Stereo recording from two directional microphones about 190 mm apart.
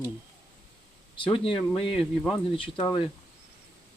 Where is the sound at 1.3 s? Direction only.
30° left (ahead or behind).